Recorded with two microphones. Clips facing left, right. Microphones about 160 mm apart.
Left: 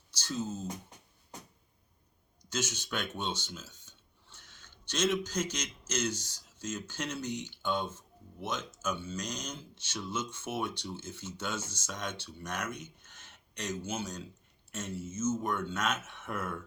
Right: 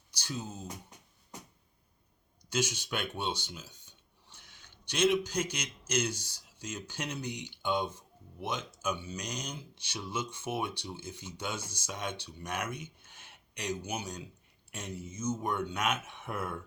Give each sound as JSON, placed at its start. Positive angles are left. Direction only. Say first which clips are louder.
{"t": 0.1, "sound": "speech", "louder": "left 4 dB", "side_deg": -10}
{"t": 2.5, "sound": "speech", "louder": "right 3 dB", "side_deg": -10}